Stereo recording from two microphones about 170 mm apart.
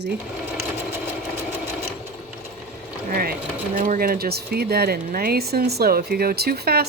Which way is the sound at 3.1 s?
60° right (ahead or behind).